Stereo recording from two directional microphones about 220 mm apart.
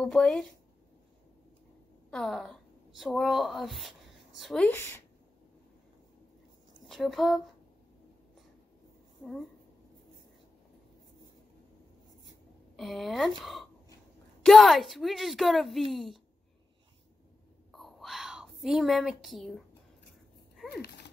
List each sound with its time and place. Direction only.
0.0 s a woman's voice: centre (ahead or behind)
2.0 s a woman's voice: centre (ahead or behind)
6.9 s a woman's voice: centre (ahead or behind)
12.7 s a woman's voice: centre (ahead or behind)
17.6 s whispering: centre (ahead or behind)
20.7 s a sound: 45° left (ahead or behind)